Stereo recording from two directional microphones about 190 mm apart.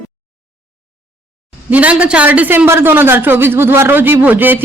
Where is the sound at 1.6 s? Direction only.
5° right (ahead or behind).